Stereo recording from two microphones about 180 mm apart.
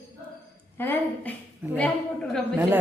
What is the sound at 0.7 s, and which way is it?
A woman's voice, 10° left (ahead or behind).